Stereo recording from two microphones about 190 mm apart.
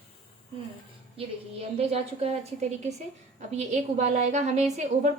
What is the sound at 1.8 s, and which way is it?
A woman's voice, 35° right (ahead or behind).